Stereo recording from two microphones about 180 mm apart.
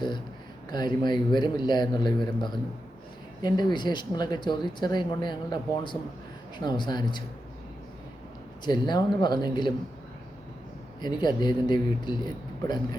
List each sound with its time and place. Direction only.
0.7 s speech: 25° left (ahead or behind)
3.4 s speech: 25° left (ahead or behind)
8.6 s speech: 25° left (ahead or behind)
11.0 s speech: 25° left (ahead or behind)